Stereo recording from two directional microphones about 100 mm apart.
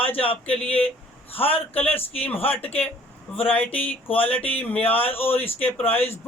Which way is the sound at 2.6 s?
90° left.